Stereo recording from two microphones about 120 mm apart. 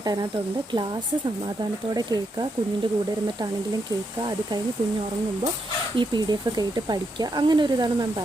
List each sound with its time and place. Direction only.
0.0 s speech: 30° right (ahead or behind)
1.9 s speech: 35° right (ahead or behind)
4.2 s speech: 35° right (ahead or behind)
6.0 s speech: 35° right (ahead or behind)